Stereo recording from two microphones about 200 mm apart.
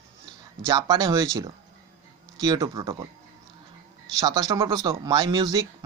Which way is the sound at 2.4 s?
20° right (ahead or behind).